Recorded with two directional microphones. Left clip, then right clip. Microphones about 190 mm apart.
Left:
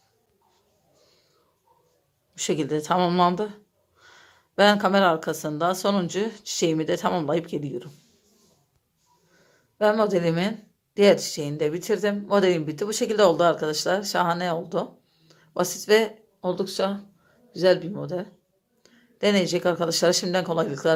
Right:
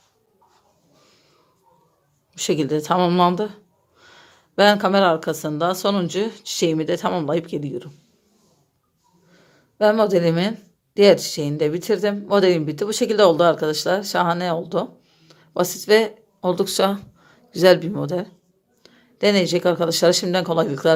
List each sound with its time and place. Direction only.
2.3 s speech: 5° right (ahead or behind)
9.3 s a sound: 10° right (ahead or behind)
10.9 s speech: 10° right (ahead or behind)